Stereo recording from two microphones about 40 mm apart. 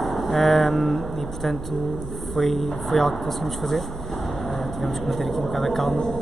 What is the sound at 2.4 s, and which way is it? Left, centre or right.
Speech, centre.